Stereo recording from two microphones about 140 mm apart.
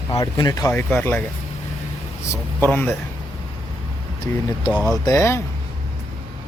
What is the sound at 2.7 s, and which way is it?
Speech, 10° left (ahead or behind).